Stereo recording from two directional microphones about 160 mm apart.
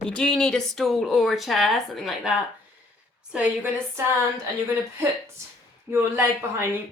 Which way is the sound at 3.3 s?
10° right (ahead or behind).